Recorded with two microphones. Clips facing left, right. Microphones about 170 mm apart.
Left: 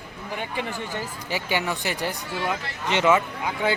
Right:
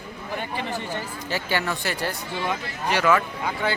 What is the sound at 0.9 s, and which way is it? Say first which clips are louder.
A man's voice: right 1 dB; 15° left (ahead or behind).